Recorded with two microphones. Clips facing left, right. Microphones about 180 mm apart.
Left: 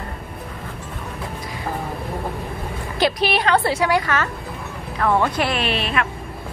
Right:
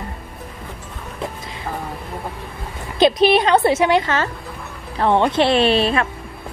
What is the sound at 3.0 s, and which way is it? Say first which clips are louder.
A woman's voice: right 6 dB; 20° right (ahead or behind).